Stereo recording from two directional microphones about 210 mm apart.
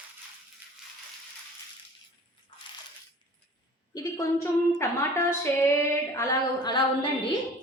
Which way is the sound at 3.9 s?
15° left (ahead or behind).